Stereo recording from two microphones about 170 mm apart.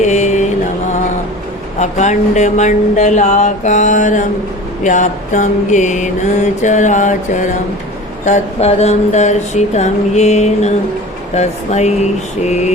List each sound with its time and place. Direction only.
0.0 s mantra: 45° left (ahead or behind)
1.8 s mantra: 45° left (ahead or behind)
8.2 s speech: 40° left (ahead or behind)